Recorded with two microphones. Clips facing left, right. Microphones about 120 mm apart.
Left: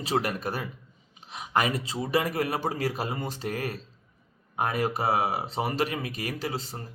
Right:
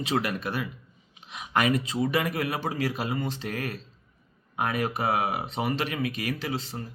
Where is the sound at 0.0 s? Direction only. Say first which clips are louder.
Even; 40° left (ahead or behind).